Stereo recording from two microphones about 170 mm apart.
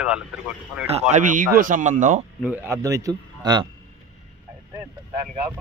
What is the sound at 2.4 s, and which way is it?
Speech, 10° right (ahead or behind).